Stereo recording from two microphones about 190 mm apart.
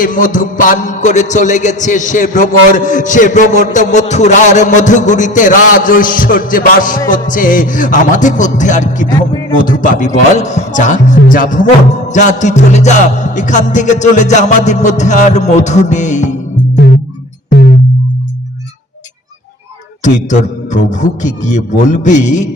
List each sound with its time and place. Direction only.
0.0 s music: 45° left (ahead or behind)
17.5 s music: 55° left (ahead or behind)
20.0 s music: 40° left (ahead or behind)